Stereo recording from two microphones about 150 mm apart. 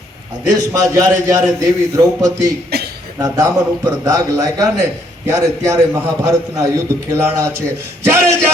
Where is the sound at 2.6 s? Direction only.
90° right.